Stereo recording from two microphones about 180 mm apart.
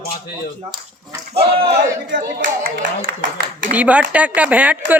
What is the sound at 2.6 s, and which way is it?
Speech, 55° right (ahead or behind).